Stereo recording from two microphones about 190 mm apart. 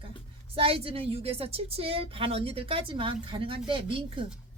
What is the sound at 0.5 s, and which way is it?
Music, 30° right (ahead or behind).